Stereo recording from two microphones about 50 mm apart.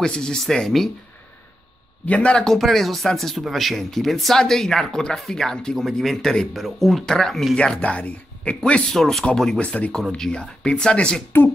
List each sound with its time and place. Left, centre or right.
0.0 s speech: centre
0.7 s speech: centre
2.0 s speech: left
2.4 s speech: centre
7.5 s speech: left
8.9 s speech: centre
9.6 s speech: left
10.1 s speech: centre